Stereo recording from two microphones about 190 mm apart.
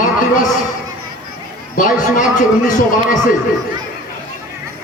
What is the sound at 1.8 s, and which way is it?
A man's voice, 45° left (ahead or behind).